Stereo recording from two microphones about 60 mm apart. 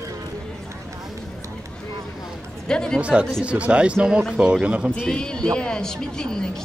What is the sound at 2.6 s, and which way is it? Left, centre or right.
Speech, centre.